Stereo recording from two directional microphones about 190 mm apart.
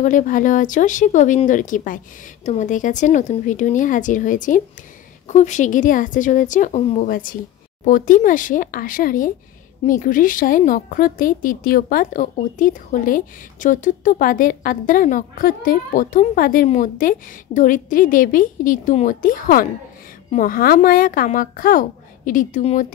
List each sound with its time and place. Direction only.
0.0 s speech: 45° left (ahead or behind)